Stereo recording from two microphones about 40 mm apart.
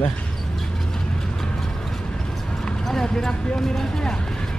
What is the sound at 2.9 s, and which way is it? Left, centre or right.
Clip-clop, centre.